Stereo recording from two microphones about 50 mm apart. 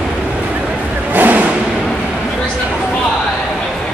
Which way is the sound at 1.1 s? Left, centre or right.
Right.